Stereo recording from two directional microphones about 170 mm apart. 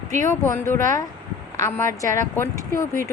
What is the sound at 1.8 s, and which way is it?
A woman's voice, 20° left (ahead or behind).